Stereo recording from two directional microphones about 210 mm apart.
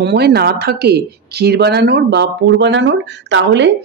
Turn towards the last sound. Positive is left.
turn(degrees=-60)  # may be behind; listen again after turning